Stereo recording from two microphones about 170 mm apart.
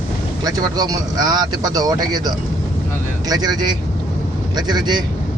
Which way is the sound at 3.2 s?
25° right (ahead or behind).